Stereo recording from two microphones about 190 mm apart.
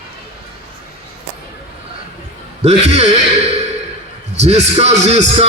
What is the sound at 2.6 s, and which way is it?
Speech, 35° right (ahead or behind).